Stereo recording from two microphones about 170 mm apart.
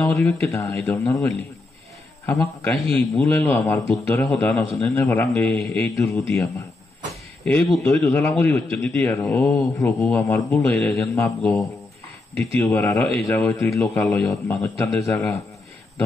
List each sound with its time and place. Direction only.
0.0 s a man's voice: 15° left (ahead or behind)
2.6 s a man's voice: 5° left (ahead or behind)
5.9 s speech: 20° left (ahead or behind)
7.4 s a man's voice: 5° left (ahead or behind)
8.0 s a man's voice: 15° left (ahead or behind)
10.8 s a man's voice: 5° left (ahead or behind)
12.5 s a man's voice: 15° left (ahead or behind)
14.2 s a man's voice: 20° left (ahead or behind)